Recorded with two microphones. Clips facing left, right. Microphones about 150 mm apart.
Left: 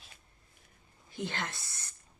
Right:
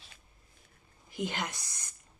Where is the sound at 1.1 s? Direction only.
15° right (ahead or behind).